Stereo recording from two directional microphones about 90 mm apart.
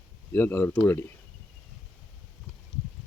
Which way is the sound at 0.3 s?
20° left (ahead or behind).